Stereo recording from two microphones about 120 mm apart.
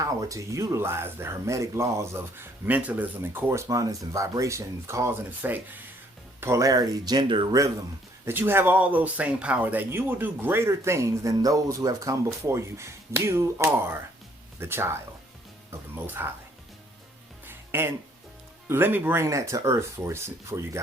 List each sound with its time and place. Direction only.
0.0 s speech: 30° right (ahead or behind)
3.7 s speech: 30° right (ahead or behind)
6.4 s speech: 25° right (ahead or behind); by 7.5 s 45° right (ahead or behind)
8.2 s speech: 20° right (ahead or behind)
16.0 s speech: 20° right (ahead or behind)
17.4 s music: 20° right (ahead or behind)
18.7 s speech: 15° right (ahead or behind)